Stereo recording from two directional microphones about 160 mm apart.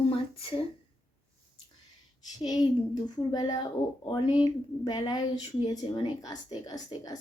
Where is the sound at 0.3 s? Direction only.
35° left (ahead or behind).